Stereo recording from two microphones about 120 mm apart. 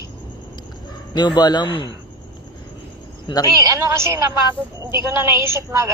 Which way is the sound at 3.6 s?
25° right (ahead or behind).